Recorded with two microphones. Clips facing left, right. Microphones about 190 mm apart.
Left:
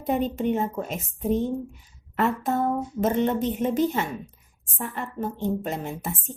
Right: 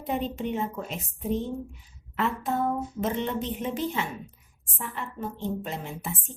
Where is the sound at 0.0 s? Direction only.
45° left (ahead or behind).